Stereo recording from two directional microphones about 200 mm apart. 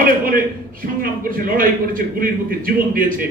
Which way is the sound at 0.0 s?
45° right (ahead or behind).